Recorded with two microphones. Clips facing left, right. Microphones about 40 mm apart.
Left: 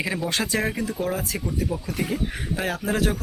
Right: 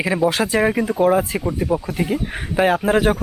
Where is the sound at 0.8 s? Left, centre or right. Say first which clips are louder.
Right 10 dB; right.